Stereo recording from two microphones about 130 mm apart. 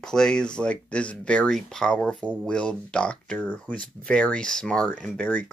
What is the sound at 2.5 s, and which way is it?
Speech, 5° left (ahead or behind).